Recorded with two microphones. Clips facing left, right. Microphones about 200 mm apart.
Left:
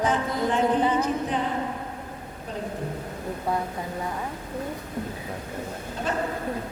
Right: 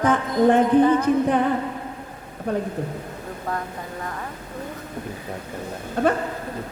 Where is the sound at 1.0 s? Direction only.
55° right (ahead or behind).